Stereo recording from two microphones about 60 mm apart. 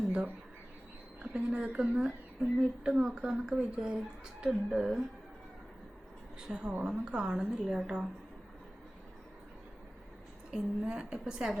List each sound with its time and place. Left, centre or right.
1.2 s speech: centre
1.9 s speech: centre
6.4 s speech: centre
10.5 s speech: centre